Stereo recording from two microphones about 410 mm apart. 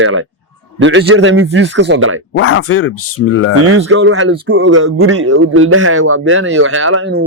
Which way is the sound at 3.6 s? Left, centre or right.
Right.